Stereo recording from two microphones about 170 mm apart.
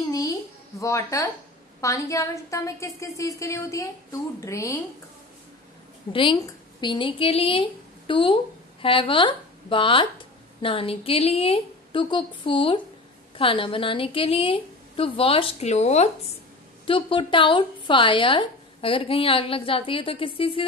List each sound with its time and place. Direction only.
0.1 s a woman's voice: 20° left (ahead or behind)
6.1 s a woman's voice: 25° left (ahead or behind)